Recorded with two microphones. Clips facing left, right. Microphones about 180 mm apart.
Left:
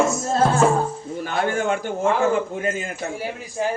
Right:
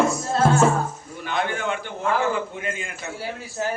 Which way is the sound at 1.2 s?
45° left (ahead or behind).